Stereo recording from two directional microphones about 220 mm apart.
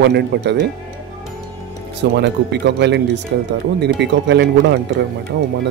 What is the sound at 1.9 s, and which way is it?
Speech, 50° right (ahead or behind).